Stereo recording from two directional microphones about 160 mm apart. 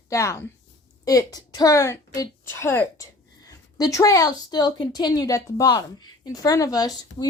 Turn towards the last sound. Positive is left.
turn(degrees=25)  # may be behind; listen again after turning